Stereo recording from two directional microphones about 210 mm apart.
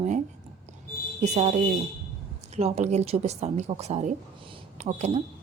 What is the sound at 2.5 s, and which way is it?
A woman's voice, 30° right (ahead or behind).